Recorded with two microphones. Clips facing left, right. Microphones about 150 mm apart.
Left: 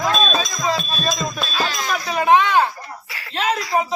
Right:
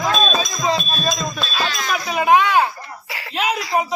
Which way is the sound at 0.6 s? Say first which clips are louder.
Right 3 dB; 15° right (ahead or behind).